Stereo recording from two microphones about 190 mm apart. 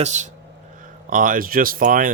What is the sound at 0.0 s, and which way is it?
Speech, 40° right (ahead or behind).